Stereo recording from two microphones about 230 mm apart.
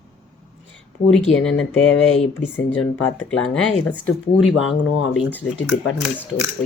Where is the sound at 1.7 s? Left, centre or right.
Left.